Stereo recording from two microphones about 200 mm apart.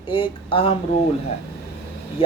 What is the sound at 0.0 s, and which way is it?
Speech, 25° left (ahead or behind).